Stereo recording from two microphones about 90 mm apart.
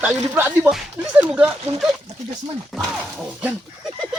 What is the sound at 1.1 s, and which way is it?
Speech, 10° right (ahead or behind).